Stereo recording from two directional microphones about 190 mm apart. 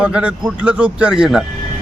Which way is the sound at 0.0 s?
5° right (ahead or behind).